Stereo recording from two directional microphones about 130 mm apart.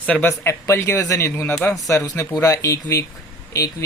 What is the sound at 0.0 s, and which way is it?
Speech, 10° left (ahead or behind).